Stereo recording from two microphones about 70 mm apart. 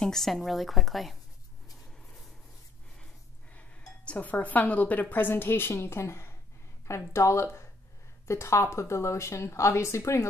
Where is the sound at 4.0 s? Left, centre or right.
Centre.